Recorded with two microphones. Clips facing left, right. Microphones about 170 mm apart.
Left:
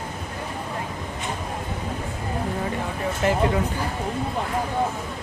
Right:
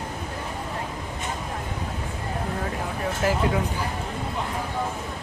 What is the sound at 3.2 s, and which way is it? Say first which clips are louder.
Speech: left 2 dB; centre (ahead or behind).